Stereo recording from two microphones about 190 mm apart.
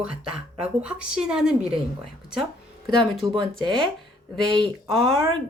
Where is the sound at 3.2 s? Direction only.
25° right (ahead or behind).